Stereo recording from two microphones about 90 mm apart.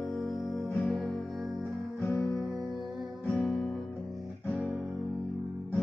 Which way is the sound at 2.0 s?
35° left (ahead or behind).